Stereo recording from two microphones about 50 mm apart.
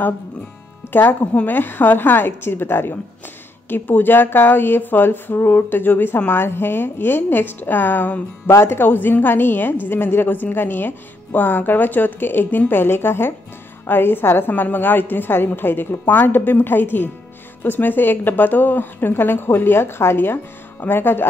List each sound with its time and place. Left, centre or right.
0.8 s music: left
1.2 s a woman's voice: left
1.5 s a woman's voice: left
8.5 s a woman's voice: left